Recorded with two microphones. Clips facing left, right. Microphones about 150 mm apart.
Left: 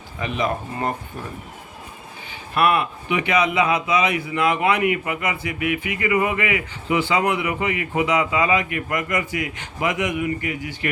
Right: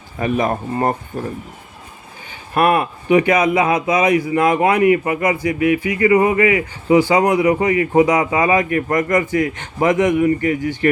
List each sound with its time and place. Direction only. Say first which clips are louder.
0.2 s speech: right 6 dB; 45° right (ahead or behind)
2.6 s speech: right 4 dB; 45° right (ahead or behind)